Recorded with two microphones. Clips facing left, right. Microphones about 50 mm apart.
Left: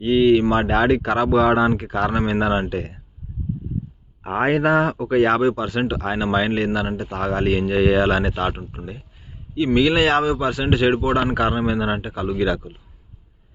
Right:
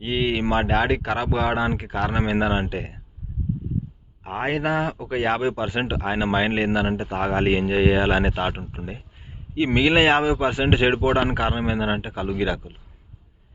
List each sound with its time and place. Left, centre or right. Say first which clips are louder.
0.0 s speech: left 8 dB; centre
4.2 s a man's voice: left 7 dB; left
4.4 s speech: left 5 dB; centre
5.5 s a man's voice: left 2 dB; right
11.3 s speech: left 3 dB; centre